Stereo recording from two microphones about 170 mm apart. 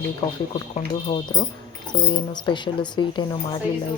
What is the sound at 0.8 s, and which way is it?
Speech, 35° left (ahead or behind).